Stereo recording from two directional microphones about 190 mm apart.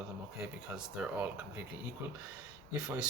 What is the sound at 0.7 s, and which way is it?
Speech, 5° right (ahead or behind).